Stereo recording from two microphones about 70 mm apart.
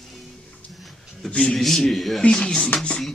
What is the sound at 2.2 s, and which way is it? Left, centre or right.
Speech, centre.